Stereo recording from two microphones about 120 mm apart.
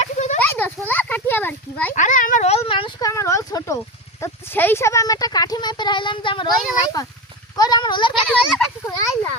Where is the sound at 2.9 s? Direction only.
25° left (ahead or behind); by 6.5 s 45° left (ahead or behind).